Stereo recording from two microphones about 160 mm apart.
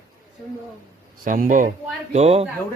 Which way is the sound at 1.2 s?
55° right (ahead or behind).